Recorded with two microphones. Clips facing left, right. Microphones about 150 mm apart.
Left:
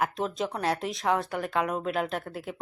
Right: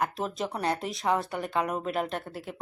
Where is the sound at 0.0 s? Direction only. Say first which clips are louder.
Left 1 dB; centre (ahead or behind).